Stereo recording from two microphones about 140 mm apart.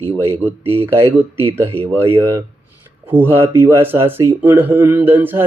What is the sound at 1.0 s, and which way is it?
Speech, 15° right (ahead or behind).